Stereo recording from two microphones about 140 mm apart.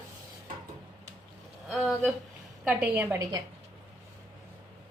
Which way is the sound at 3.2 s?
25° right (ahead or behind).